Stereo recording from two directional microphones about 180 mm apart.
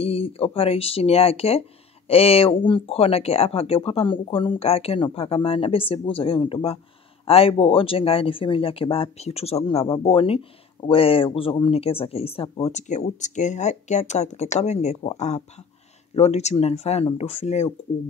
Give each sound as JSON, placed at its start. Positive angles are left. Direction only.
{"t": 0.0, "sound": "speech", "side_deg": 35}